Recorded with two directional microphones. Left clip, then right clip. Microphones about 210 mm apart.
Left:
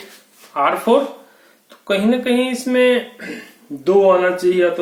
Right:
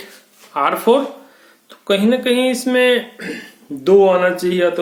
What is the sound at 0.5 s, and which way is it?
Speech, 55° right (ahead or behind).